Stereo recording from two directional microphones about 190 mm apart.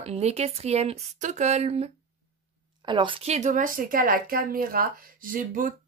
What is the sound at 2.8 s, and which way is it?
A woman's voice, 25° right (ahead or behind).